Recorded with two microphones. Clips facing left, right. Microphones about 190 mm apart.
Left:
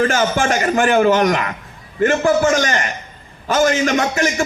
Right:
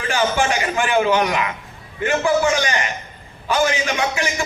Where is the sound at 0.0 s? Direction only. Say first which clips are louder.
Left 3 dB; 45° left (ahead or behind).